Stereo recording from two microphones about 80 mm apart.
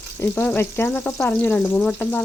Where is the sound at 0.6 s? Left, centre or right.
Left.